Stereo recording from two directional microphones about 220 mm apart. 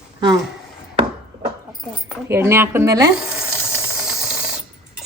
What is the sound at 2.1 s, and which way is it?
Speech, 10° right (ahead or behind).